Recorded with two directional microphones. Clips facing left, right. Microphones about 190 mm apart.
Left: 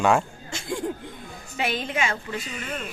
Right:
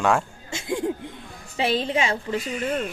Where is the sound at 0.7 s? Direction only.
20° right (ahead or behind).